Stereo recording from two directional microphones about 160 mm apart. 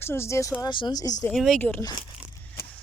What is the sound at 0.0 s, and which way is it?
Speech, 15° left (ahead or behind).